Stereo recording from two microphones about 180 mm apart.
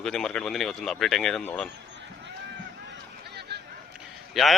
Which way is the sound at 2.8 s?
65° right (ahead or behind).